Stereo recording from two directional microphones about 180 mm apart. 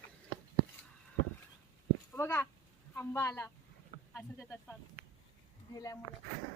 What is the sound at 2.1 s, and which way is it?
A woman's voice, 10° left (ahead or behind).